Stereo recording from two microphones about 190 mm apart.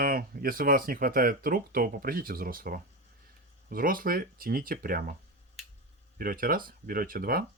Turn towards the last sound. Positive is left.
turn(degrees=-50)  # may be behind; listen again after turning